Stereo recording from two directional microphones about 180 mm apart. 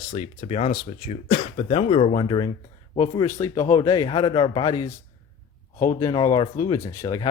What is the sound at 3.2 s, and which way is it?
Speech, 15° left (ahead or behind).